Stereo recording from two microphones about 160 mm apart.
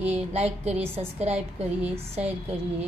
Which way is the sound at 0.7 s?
15° right (ahead or behind).